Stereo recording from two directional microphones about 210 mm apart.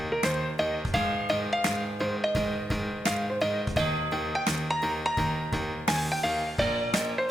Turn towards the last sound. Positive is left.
turn(degrees=0)  # may be behind; listen again after turning